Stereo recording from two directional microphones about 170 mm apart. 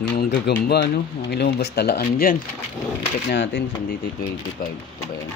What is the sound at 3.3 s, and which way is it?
Speech, 90° left.